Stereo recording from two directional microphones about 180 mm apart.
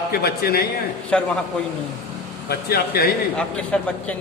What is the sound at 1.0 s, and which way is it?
Speech, 5° left (ahead or behind).